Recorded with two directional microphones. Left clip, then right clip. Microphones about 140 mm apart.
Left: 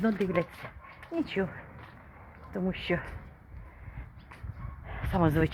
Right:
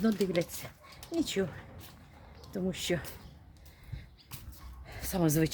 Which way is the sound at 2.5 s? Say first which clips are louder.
Left 2 dB; 20° right (ahead or behind).